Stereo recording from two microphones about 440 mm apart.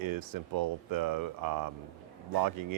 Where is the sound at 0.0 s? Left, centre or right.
Right.